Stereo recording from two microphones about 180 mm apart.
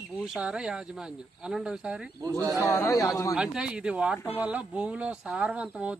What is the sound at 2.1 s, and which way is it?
Speech, 20° right (ahead or behind).